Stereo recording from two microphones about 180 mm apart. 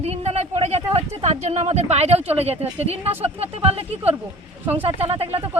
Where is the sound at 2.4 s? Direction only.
35° right (ahead or behind).